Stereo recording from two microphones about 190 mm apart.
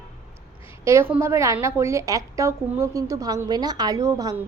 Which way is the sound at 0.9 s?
15° right (ahead or behind).